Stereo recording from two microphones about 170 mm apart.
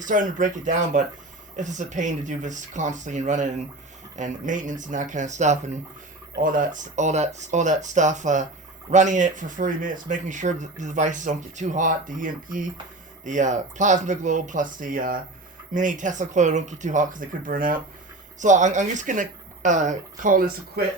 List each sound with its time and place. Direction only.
0.0 s speech: 50° right (ahead or behind)
6.3 s speech: 55° right (ahead or behind)